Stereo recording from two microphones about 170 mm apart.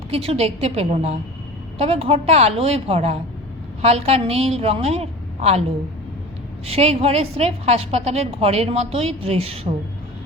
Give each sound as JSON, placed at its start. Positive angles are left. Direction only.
{"t": 0.1, "sound": "a woman's voice", "side_deg": -35}
{"t": 6.7, "sound": "a woman's voice", "side_deg": -35}